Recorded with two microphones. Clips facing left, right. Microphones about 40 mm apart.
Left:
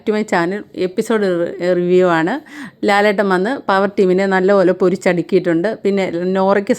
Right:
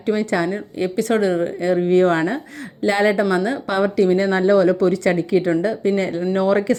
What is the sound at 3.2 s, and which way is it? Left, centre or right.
Speech, left.